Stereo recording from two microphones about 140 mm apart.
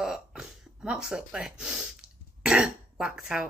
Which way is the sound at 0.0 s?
5° right (ahead or behind).